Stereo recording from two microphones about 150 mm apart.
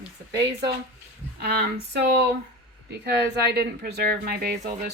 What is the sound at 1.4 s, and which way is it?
Speech, 90° right.